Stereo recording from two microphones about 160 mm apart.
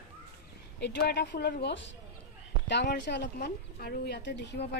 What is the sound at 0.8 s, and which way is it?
Speech, 90° left.